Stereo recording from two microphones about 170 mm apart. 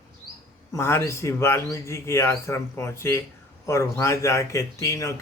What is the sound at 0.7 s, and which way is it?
Speech, 15° left (ahead or behind).